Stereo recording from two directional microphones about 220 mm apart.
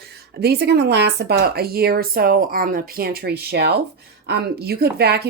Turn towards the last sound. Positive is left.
turn(degrees=-45)  # may be behind; listen again after turning